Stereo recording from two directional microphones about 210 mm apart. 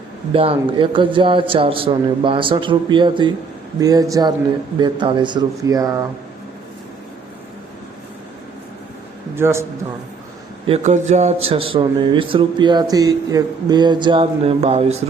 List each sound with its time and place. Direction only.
0.3 s a man's voice: 25° right (ahead or behind)
9.3 s a man's voice: 10° right (ahead or behind)
10.7 s a man's voice: 35° right (ahead or behind)